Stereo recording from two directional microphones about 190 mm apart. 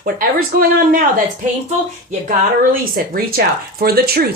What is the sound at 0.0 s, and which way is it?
Speech, 50° right (ahead or behind).